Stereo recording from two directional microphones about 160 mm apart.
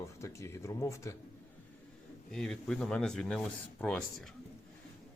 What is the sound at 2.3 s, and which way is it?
Speech, 5° left (ahead or behind).